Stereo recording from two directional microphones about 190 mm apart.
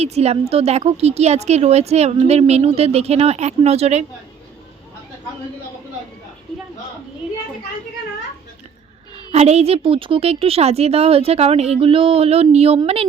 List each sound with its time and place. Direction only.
0.0 s a woman's voice: 35° right (ahead or behind)
9.3 s a woman's voice: 35° right (ahead or behind)